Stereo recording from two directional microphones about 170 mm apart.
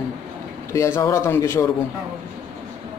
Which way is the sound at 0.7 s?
15° left (ahead or behind).